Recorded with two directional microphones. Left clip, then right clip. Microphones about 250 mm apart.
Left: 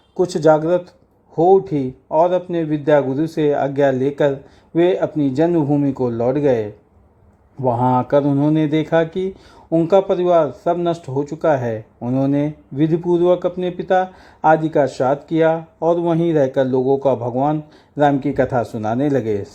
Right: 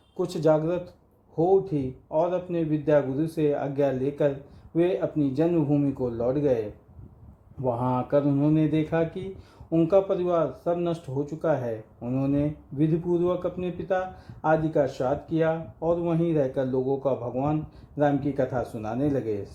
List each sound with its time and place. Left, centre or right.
0.2 s speech: left
7.6 s speech: left